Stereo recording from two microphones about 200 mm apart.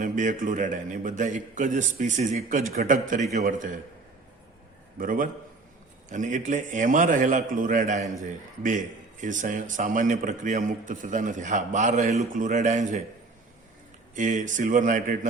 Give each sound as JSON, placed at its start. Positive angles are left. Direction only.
{"t": 0.0, "sound": "a man's voice", "side_deg": -40}
{"t": 4.9, "sound": "a man's voice", "side_deg": -45}
{"t": 14.2, "sound": "a man's voice", "side_deg": -40}